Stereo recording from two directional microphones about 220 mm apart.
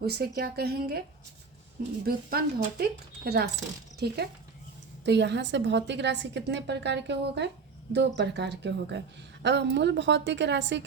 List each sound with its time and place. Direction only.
0.0 s a woman's voice: 45° right (ahead or behind)
2.0 s a woman's voice: 45° right (ahead or behind)